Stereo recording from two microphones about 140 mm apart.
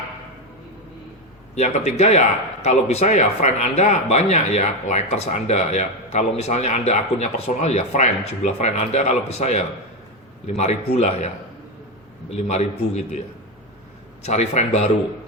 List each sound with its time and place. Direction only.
1.5 s a man's voice: 50° left (ahead or behind)
12.3 s a man's voice: 50° left (ahead or behind)